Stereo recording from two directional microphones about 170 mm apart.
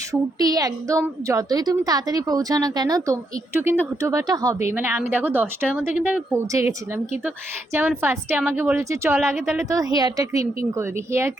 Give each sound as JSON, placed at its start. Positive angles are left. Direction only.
{"t": 0.1, "sound": "a woman's voice", "side_deg": -20}